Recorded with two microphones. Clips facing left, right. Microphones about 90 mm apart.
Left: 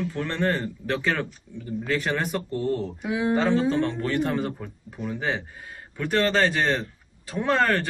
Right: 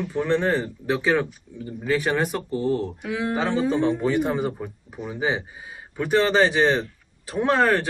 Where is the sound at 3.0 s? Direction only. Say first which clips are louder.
Left 1 dB; 20° left (ahead or behind).